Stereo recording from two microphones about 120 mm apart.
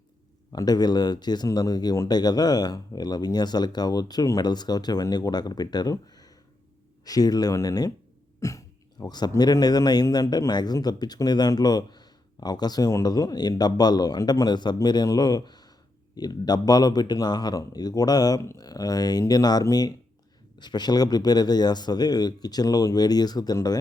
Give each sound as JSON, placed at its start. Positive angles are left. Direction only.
{"t": 0.5, "sound": "a man's voice", "side_deg": 35}